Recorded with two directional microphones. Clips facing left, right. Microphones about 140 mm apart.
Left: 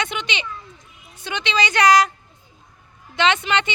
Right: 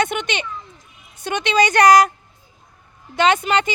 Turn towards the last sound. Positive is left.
turn(degrees=-40)  # may be behind; listen again after turning